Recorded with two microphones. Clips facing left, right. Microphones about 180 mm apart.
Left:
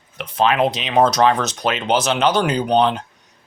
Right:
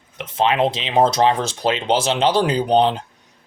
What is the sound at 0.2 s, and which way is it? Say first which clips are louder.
Speech: left 1 dB; 25° right (ahead or behind).